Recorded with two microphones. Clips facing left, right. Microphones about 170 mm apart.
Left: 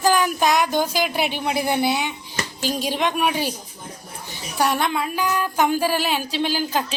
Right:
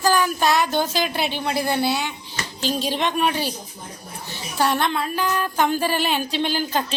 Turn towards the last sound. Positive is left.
turn(degrees=5)  # may be behind; listen again after turning